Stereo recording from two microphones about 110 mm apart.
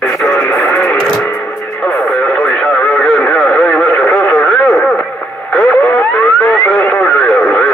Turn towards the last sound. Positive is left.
turn(degrees=10)  # may be behind; listen again after turning